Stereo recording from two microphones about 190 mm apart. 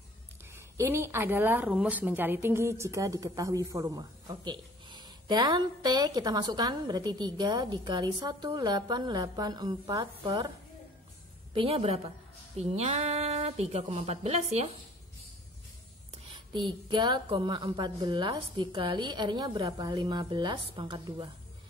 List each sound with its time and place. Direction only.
0.7 s a woman's voice: 15° right (ahead or behind)
11.5 s speech: 30° right (ahead or behind)
16.5 s a woman's voice: 25° right (ahead or behind)